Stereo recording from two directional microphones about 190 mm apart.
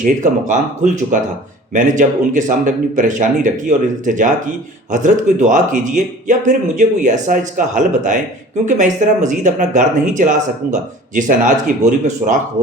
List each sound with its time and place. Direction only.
0.0 s speech: 40° right (ahead or behind)
1.7 s speech: 40° right (ahead or behind)